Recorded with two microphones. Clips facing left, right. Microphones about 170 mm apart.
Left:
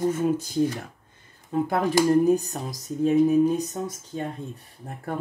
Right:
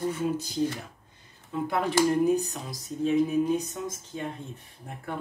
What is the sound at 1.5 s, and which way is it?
Speech, 45° left (ahead or behind).